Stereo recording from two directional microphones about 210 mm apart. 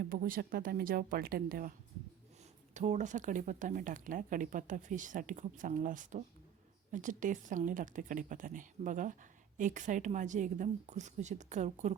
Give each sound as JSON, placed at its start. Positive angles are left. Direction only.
{"t": 0.0, "sound": "speech", "side_deg": -45}
{"t": 2.7, "sound": "speech", "side_deg": -35}